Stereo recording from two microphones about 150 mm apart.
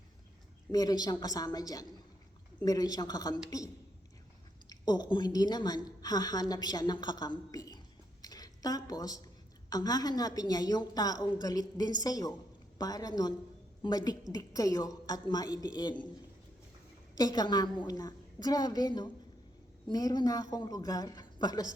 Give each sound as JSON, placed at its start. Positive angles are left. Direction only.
{"t": 0.7, "sound": "a woman's voice", "side_deg": 25}
{"t": 4.7, "sound": "a woman's voice", "side_deg": 30}
{"t": 8.2, "sound": "a sound", "side_deg": 25}
{"t": 9.6, "sound": "a woman's voice", "side_deg": 25}
{"t": 17.2, "sound": "a woman's voice", "side_deg": 25}